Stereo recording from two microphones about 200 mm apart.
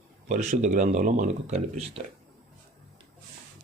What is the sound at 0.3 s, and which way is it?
Speech, 35° right (ahead or behind).